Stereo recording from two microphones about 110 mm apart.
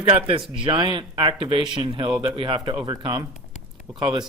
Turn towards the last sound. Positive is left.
turn(degrees=-45)  # may be behind; listen again after turning